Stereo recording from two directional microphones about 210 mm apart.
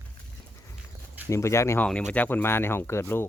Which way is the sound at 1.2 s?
15° left (ahead or behind).